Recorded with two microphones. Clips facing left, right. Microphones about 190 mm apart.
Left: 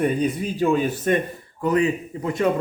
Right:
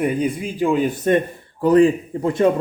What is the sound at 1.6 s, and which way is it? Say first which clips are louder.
Speech: right 7 dB; 30° right (ahead or behind).